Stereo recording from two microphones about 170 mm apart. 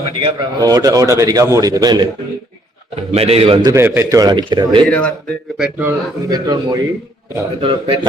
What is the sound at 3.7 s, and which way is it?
A man's voice, 15° right (ahead or behind).